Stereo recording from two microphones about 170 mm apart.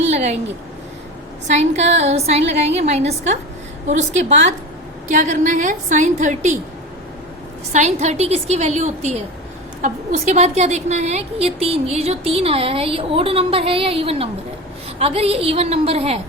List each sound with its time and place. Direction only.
0.1 s a sound: 40° right (ahead or behind)
1.5 s a woman's voice: 40° right (ahead or behind)
7.7 s a woman's voice: 40° right (ahead or behind)